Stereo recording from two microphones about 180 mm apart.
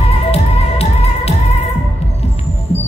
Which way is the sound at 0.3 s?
35° left (ahead or behind).